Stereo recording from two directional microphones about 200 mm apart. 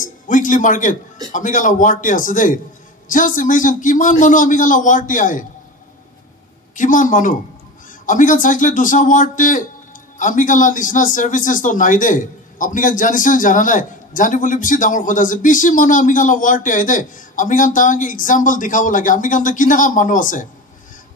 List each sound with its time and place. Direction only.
0.0 s music: 40° left (ahead or behind)
1.3 s a man's voice: 40° left (ahead or behind)
6.7 s a man's voice: 40° left (ahead or behind)